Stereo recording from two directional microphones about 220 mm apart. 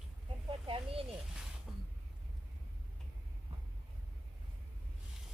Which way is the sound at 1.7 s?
Centre (ahead or behind).